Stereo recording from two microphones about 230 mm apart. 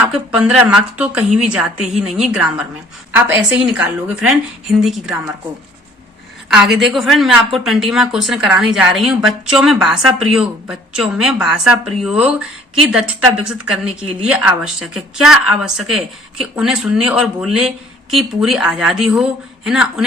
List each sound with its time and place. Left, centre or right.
0.0 s speech: centre
6.5 s speech: centre
14.3 s speech: centre